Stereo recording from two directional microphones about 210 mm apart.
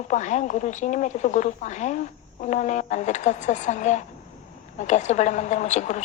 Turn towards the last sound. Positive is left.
turn(degrees=35)  # may be behind; listen again after turning